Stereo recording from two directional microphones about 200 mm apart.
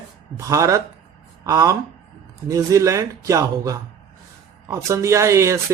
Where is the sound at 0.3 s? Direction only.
15° right (ahead or behind).